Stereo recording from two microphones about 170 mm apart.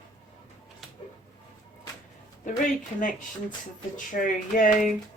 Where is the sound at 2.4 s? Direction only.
50° left (ahead or behind).